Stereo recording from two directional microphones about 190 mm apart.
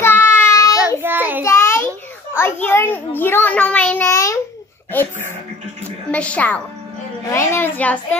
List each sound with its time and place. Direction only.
0.0 s child singing: 10° left (ahead or behind)
0.7 s child singing: 10° right (ahead or behind)
1.4 s child singing: 15° left (ahead or behind)
2.3 s a sound: 15° left (ahead or behind)
4.9 s a child's voice: 10° left (ahead or behind)
6.1 s a child's voice: 5° left (ahead or behind)